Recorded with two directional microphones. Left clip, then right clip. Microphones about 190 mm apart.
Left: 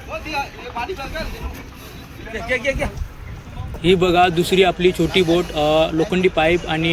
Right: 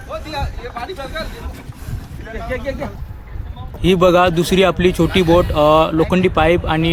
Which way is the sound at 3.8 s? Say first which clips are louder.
Right 3 dB; 40° right (ahead or behind).